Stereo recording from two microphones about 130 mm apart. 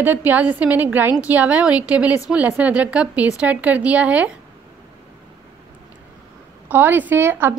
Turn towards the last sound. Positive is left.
turn(degrees=-20)  # may be behind; listen again after turning